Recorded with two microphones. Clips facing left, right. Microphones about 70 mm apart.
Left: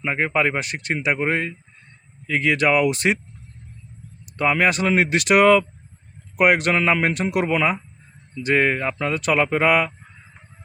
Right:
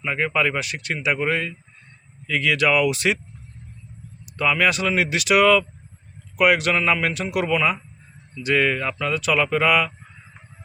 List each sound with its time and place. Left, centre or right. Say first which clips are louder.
0.0 s speech: left 1 dB; left
4.4 s speech: left 1 dB; left